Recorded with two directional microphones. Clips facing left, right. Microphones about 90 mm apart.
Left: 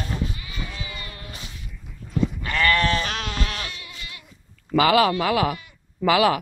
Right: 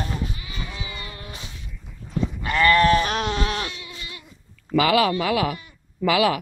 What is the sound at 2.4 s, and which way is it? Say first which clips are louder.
Goat: right 6 dB; 20° right (ahead or behind).